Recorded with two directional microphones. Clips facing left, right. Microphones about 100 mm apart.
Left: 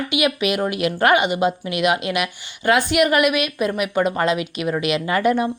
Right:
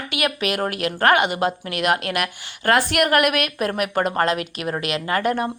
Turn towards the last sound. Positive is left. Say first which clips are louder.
# left 3 dB
turn(degrees=-40)  # may be behind; listen again after turning